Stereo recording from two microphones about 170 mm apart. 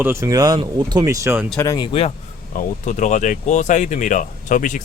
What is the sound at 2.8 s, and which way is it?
Speech, 45° left (ahead or behind).